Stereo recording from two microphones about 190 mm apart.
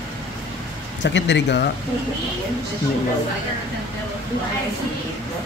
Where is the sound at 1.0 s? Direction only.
70° left (ahead or behind).